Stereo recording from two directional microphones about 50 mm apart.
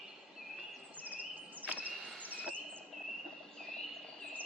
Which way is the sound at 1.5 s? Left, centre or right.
Right.